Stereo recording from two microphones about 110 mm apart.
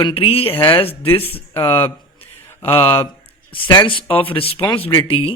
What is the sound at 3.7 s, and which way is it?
Speech, 45° left (ahead or behind).